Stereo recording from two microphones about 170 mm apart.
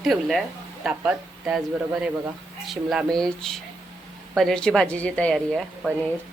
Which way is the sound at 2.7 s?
Centre (ahead or behind).